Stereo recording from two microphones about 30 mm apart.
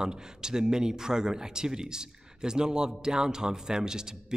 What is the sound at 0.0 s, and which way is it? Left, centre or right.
Speech, right.